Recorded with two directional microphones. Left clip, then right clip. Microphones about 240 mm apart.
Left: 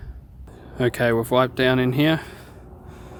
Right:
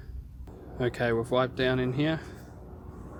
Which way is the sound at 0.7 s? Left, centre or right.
Left.